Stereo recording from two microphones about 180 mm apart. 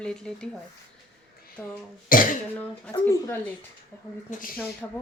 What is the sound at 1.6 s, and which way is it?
Speech, 5° left (ahead or behind).